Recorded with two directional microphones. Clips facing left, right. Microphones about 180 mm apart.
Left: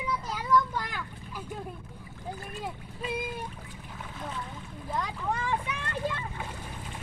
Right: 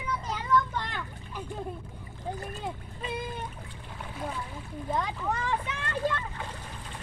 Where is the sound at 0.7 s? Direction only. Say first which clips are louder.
Even; 5° left (ahead or behind).